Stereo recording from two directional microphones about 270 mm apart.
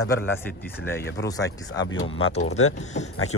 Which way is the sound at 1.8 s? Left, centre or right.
Left.